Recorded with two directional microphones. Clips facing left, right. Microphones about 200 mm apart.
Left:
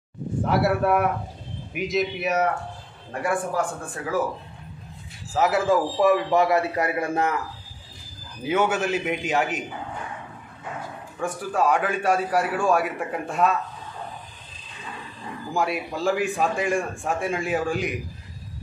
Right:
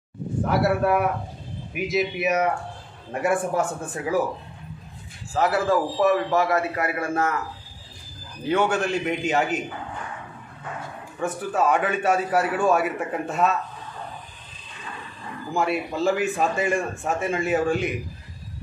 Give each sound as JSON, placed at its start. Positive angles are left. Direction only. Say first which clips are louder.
{"t": 0.5, "sound": "a man's voice", "louder": "even", "side_deg": 0}
{"t": 3.1, "sound": "speech", "louder": "right 3 dB", "side_deg": -25}
{"t": 5.3, "sound": "a man's voice", "louder": "left 1 dB", "side_deg": 5}
{"t": 8.5, "sound": "a man's voice", "louder": "even", "side_deg": 5}
{"t": 11.1, "sound": "a man's voice", "louder": "right 1 dB", "side_deg": -5}
{"t": 15.5, "sound": "a man's voice", "louder": "right 2 dB", "side_deg": 0}